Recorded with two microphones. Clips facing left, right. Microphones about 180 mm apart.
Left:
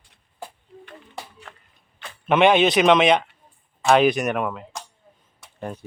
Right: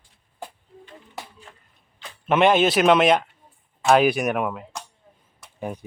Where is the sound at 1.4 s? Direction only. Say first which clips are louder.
Left 3 dB; 70° left (ahead or behind).